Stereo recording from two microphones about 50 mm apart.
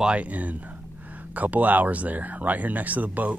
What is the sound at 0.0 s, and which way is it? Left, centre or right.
Speech, right.